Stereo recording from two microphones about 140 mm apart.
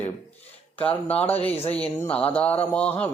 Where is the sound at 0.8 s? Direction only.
10° left (ahead or behind).